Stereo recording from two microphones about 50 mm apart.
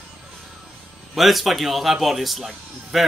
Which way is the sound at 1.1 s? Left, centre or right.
Centre.